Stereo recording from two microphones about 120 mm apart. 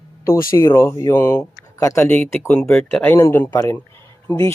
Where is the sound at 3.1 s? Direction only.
25° left (ahead or behind).